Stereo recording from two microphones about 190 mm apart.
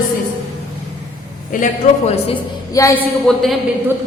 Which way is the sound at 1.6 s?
35° left (ahead or behind).